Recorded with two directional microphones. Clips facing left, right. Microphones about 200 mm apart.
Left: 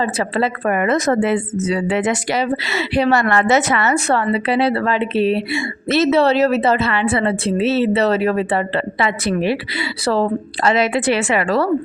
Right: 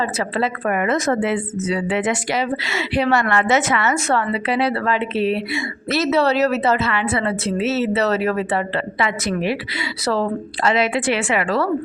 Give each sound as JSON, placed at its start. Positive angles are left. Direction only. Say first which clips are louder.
{"t": 0.0, "sound": "a woman's voice", "louder": "left 3 dB", "side_deg": 30}